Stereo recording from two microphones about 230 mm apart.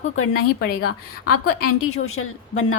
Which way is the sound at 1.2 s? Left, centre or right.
Left.